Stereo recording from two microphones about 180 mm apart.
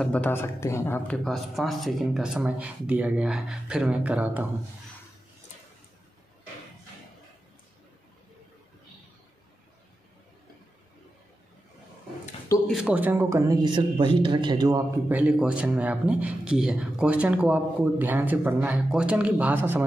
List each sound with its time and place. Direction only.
0.0 s speech: 5° left (ahead or behind); by 4.5 s 10° right (ahead or behind)
12.6 s speech: 5° right (ahead or behind); by 14.8 s 25° right (ahead or behind)
15.0 s speech: 10° right (ahead or behind)